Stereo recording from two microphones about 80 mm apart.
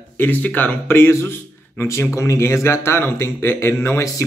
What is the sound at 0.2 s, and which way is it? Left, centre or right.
A man's voice, left.